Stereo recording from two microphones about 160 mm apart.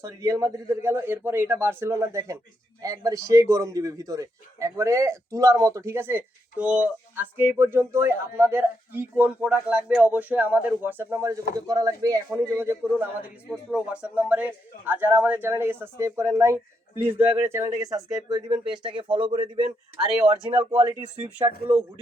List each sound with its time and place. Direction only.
0.0 s a man's voice: 20° right (ahead or behind)
20.4 s a man's voice: 15° right (ahead or behind)
21.4 s speech: 30° right (ahead or behind)